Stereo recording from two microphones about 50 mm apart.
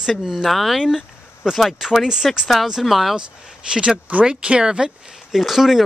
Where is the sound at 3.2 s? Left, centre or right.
Centre.